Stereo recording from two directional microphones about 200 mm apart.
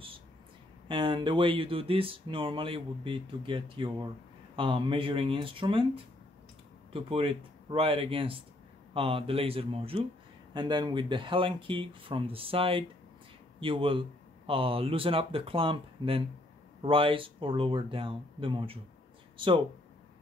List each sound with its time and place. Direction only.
0.8 s speech: 25° right (ahead or behind)
6.9 s speech: 25° right (ahead or behind)